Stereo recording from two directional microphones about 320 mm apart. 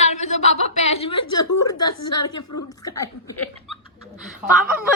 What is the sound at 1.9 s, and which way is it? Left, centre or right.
Speech, left.